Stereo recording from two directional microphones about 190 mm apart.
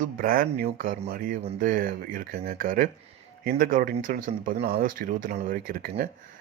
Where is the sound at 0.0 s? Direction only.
50° right (ahead or behind).